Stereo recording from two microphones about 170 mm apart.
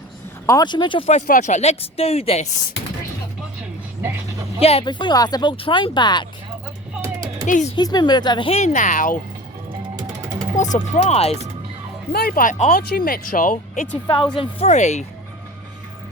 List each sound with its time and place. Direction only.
0.4 s speech: 25° left (ahead or behind)
1.1 s speech: 45° left (ahead or behind)
4.0 s dog: 20° right (ahead or behind)
4.6 s speech: 35° left (ahead or behind)
7.0 s a sound: 20° right (ahead or behind)
7.4 s speech: 50° left (ahead or behind)
7.8 s speech: 25° left (ahead or behind); by 9.1 s 50° left (ahead or behind)
9.9 s music: 20° right (ahead or behind)
10.6 s speech: 45° left (ahead or behind)
12.1 s speech: 60° left (ahead or behind)
12.7 s speech: 60° left (ahead or behind)
14.3 s speech: 40° left (ahead or behind)